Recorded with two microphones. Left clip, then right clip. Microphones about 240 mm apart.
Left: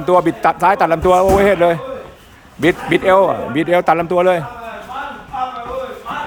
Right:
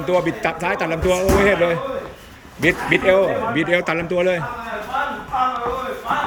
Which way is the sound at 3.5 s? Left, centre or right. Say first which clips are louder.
Left 6 dB; centre.